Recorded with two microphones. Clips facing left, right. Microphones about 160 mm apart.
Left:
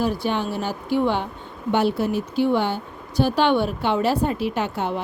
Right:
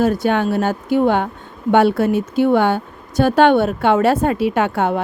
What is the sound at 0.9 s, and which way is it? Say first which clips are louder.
A woman's voice: right 5 dB; 50° right (ahead or behind).